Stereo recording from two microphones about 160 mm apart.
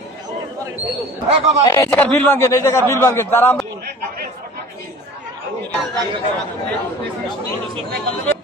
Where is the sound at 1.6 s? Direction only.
25° left (ahead or behind).